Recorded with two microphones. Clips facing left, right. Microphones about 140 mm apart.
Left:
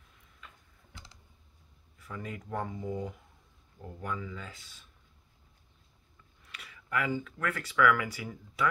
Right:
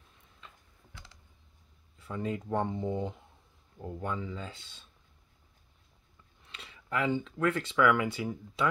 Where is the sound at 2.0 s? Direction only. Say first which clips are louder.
Right 6 dB; 25° right (ahead or behind).